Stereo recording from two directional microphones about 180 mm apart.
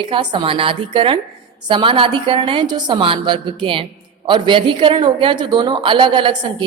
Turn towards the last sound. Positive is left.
turn(degrees=-25)  # may be behind; listen again after turning